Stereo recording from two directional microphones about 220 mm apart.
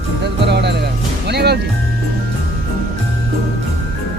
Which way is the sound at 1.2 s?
50° right (ahead or behind).